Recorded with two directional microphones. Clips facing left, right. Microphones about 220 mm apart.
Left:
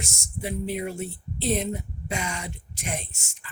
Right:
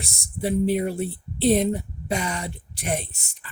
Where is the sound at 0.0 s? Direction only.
35° right (ahead or behind).